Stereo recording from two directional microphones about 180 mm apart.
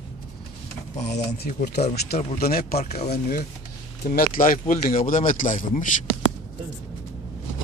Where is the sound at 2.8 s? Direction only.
40° left (ahead or behind).